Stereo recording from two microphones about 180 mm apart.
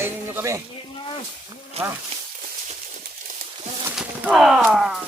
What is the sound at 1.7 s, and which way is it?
Speech, 35° right (ahead or behind).